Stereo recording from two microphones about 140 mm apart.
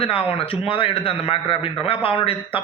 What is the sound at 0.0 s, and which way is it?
A man's voice, 40° left (ahead or behind).